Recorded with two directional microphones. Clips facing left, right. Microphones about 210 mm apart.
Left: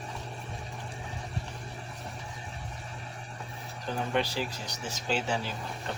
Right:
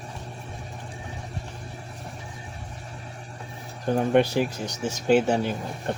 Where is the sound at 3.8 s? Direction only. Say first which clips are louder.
Right 10 dB; 55° right (ahead or behind).